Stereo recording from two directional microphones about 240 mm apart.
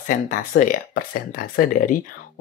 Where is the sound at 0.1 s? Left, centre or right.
Left.